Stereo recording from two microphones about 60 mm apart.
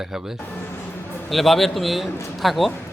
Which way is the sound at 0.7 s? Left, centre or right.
Left.